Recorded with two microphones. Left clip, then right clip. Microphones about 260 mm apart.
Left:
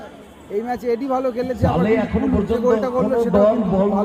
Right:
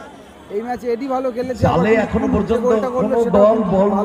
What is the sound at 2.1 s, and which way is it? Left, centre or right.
Speech, right.